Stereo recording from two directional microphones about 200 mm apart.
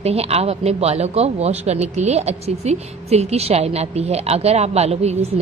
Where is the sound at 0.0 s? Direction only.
30° right (ahead or behind).